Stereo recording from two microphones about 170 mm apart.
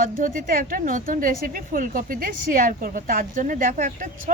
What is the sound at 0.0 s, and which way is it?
A woman's voice, 55° right (ahead or behind).